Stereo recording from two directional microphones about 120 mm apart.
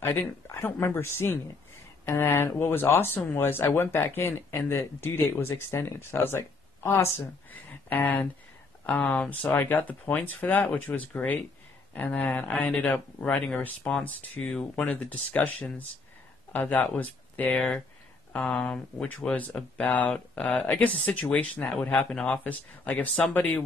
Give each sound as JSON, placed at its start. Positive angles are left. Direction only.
{"t": 0.0, "sound": "speech", "side_deg": 20}